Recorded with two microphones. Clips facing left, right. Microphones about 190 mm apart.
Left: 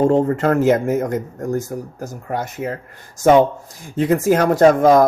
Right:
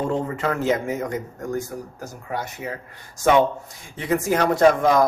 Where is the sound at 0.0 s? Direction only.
50° left (ahead or behind).